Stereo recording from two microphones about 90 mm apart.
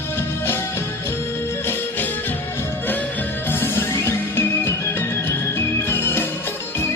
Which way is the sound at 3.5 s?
25° left (ahead or behind).